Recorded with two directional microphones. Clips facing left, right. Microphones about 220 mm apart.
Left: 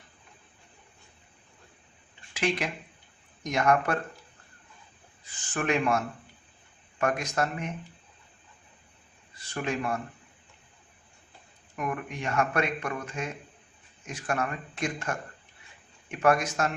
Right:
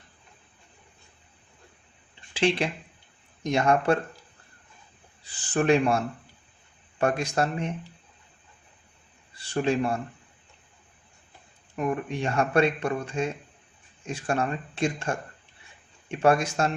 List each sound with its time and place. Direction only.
2.3 s speech: 30° right (ahead or behind)
5.2 s speech: 35° right (ahead or behind)
9.3 s speech: 30° right (ahead or behind)
11.8 s speech: 30° right (ahead or behind)